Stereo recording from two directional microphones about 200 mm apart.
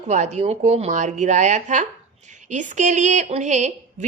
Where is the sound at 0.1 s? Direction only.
35° right (ahead or behind).